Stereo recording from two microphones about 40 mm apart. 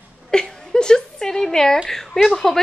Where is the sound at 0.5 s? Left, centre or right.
Centre.